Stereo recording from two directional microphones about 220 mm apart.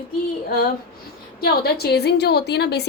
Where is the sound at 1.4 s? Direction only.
45° left (ahead or behind).